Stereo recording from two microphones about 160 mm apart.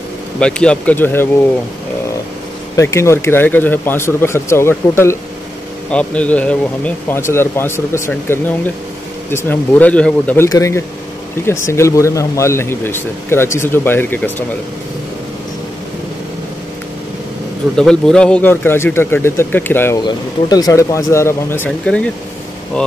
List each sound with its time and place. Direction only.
0.4 s speech: 5° left (ahead or behind)
2.7 s speech: 20° left (ahead or behind)
17.7 s speech: 5° left (ahead or behind)
20.0 s speech: 25° left (ahead or behind); by 22.9 s 5° left (ahead or behind)